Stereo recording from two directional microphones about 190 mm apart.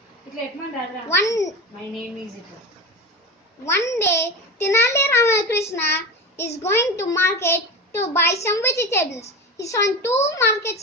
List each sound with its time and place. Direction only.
1.0 s a child's voice: 15° left (ahead or behind)
3.6 s a child's voice: 15° left (ahead or behind)